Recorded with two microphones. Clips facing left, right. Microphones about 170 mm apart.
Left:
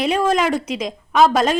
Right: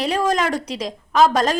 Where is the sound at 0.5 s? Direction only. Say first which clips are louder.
Left 3 dB; 35° right (ahead or behind).